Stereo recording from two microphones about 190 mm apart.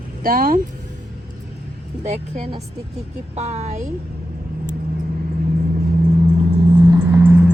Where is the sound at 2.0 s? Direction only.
35° right (ahead or behind).